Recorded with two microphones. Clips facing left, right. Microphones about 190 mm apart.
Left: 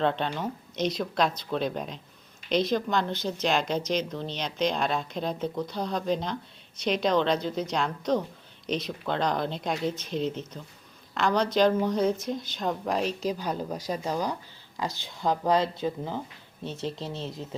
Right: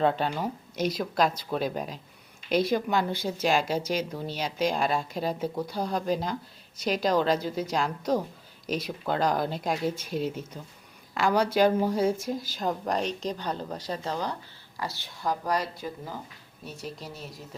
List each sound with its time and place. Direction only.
0.0 s a woman's voice: 5° right (ahead or behind); by 17.4 s 25° left (ahead or behind)